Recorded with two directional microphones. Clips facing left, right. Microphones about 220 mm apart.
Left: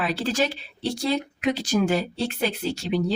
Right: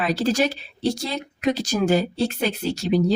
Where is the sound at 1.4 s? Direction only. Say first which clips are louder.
Right 5 dB; 40° right (ahead or behind).